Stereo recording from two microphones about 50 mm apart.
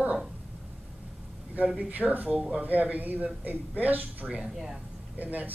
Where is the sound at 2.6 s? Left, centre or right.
Right.